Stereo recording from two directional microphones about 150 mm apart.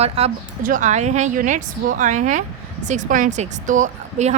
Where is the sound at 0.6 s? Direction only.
60° right (ahead or behind).